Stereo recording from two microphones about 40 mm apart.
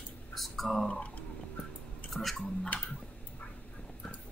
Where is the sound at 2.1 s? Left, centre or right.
Centre.